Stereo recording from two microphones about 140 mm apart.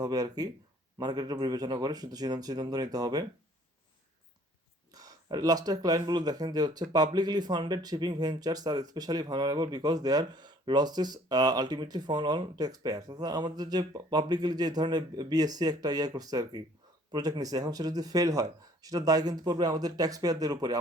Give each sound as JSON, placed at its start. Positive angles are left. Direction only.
{"t": 0.0, "sound": "speech", "side_deg": -25}
{"t": 4.9, "sound": "speech", "side_deg": -25}